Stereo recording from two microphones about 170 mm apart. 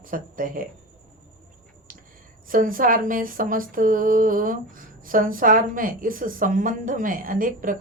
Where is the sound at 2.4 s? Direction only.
55° right (ahead or behind).